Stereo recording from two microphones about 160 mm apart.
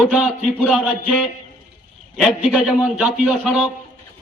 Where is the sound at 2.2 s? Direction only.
Centre (ahead or behind).